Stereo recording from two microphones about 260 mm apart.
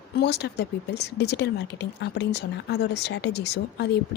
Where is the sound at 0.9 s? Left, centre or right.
Left.